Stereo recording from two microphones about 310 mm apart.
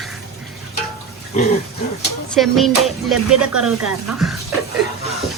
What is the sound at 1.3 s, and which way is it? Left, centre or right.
Speech, left.